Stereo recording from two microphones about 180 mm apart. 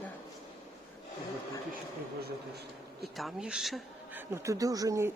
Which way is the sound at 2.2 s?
60° right (ahead or behind).